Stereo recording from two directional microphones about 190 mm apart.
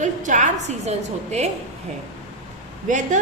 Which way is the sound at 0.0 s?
40° right (ahead or behind).